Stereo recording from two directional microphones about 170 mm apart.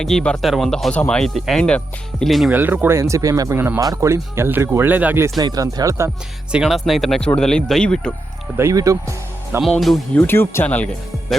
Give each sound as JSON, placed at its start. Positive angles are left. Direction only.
{"t": 0.0, "sound": "speech", "side_deg": 5}
{"t": 2.5, "sound": "speech", "side_deg": -10}
{"t": 5.4, "sound": "speech", "side_deg": -25}
{"t": 6.5, "sound": "speech", "side_deg": -5}
{"t": 8.5, "sound": "speech", "side_deg": -15}
{"t": 9.6, "sound": "speech", "side_deg": 0}